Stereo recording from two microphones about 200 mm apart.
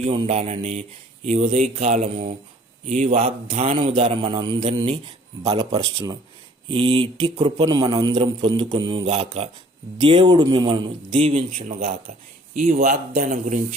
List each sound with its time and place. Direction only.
0.0 s a man's voice: 35° right (ahead or behind)
9.0 s speech: 35° right (ahead or behind)